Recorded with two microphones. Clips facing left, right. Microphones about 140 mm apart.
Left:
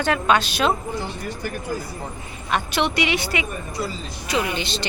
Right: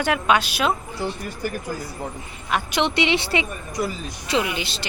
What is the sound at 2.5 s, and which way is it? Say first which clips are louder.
Speech: even; 10° right (ahead or behind).